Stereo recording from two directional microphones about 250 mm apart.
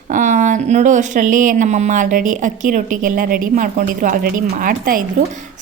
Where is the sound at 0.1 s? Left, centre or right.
Right.